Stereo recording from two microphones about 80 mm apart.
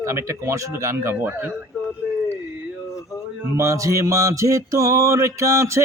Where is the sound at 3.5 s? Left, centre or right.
Right.